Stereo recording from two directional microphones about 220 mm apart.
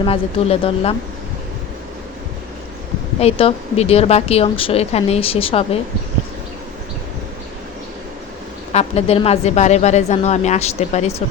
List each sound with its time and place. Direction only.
0.0 s a woman's voice: 25° left (ahead or behind)
3.2 s a woman's voice: 25° left (ahead or behind)
8.7 s a woman's voice: 30° left (ahead or behind)